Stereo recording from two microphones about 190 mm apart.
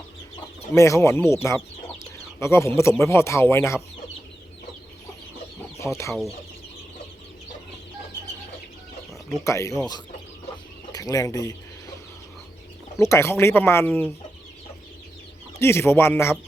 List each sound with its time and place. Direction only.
0.7 s speech: 15° left (ahead or behind)
5.8 s speech: 5° left (ahead or behind)
9.4 s speech: 15° left (ahead or behind)
13.0 s speech: 15° left (ahead or behind)
15.5 s speech: 15° left (ahead or behind)